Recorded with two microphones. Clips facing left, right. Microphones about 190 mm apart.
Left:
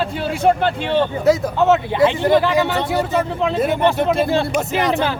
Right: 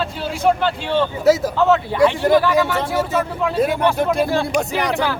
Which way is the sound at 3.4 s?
20° left (ahead or behind).